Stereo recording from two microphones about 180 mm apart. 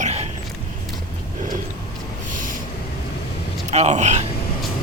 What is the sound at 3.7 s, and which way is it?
Speech, 40° right (ahead or behind).